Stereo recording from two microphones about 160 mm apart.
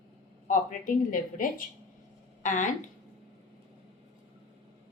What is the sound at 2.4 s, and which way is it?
Speech, 50° left (ahead or behind).